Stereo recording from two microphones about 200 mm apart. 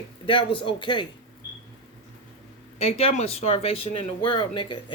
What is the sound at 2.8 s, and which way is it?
Speech, 30° left (ahead or behind).